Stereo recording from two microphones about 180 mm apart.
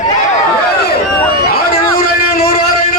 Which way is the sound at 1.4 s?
55° left (ahead or behind).